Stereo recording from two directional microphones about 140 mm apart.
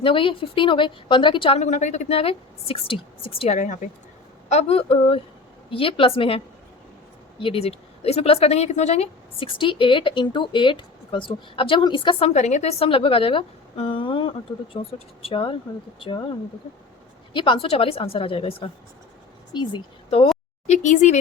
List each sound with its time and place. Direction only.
0.0 s speech: 40° left (ahead or behind)
1.5 s a woman's voice: 55° left (ahead or behind)
3.6 s speech: 60° left (ahead or behind)
4.4 s a woman's voice: 50° left (ahead or behind)
12.3 s speech: 55° left (ahead or behind); by 16.2 s 35° left (ahead or behind)
17.3 s a woman's voice: 35° left (ahead or behind)
20.7 s speech: 60° left (ahead or behind)